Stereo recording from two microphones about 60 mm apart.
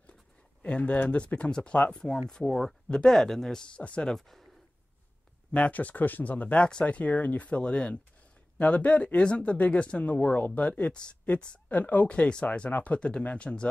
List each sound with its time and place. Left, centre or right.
0.6 s speech: left
2.2 s speech: centre
4.1 s speech: centre
5.5 s speech: left